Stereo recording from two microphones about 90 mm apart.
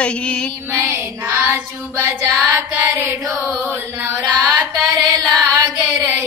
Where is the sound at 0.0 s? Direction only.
10° left (ahead or behind).